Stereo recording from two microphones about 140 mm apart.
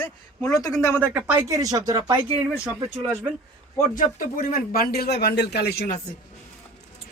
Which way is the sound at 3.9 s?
85° left.